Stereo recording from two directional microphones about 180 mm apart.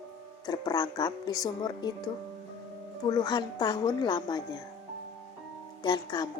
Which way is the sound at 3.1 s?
20° left (ahead or behind).